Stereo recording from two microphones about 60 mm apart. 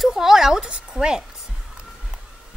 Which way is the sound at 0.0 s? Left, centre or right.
Centre.